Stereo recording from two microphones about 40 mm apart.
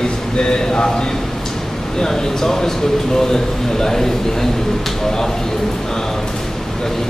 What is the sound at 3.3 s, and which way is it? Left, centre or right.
Speech, centre.